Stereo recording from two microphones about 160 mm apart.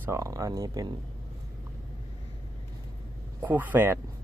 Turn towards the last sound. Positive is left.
turn(degrees=-15)  # may be behind; listen again after turning